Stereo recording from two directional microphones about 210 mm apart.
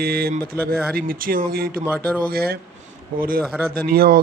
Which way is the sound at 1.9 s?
5° right (ahead or behind).